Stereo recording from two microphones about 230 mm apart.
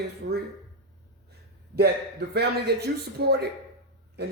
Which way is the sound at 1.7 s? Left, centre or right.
Right.